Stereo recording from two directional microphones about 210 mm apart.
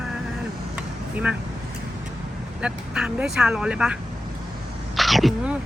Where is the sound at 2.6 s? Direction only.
5° right (ahead or behind).